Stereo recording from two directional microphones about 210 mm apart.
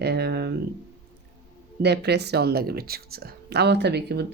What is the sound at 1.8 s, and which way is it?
Speech, 50° right (ahead or behind).